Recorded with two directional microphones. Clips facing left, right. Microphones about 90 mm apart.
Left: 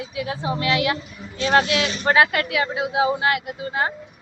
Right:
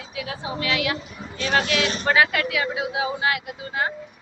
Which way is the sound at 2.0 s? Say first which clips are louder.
Left 3 dB; 40° left (ahead or behind).